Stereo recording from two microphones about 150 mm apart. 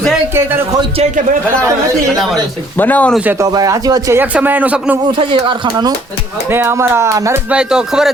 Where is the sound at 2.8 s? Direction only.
10° left (ahead or behind).